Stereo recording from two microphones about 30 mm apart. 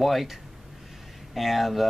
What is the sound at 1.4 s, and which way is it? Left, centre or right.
Speech, centre.